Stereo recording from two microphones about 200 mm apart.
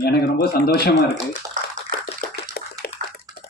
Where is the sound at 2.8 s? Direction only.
50° left (ahead or behind).